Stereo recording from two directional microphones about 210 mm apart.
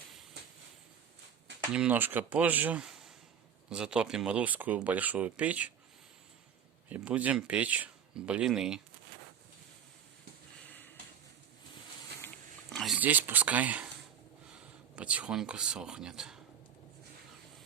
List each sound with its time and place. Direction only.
0.4 s a sound: 50° right (ahead or behind)
1.7 s speech: 5° right (ahead or behind)
6.9 s speech: 5° right (ahead or behind)
12.7 s speech: centre (ahead or behind)
14.9 s speech: 5° right (ahead or behind)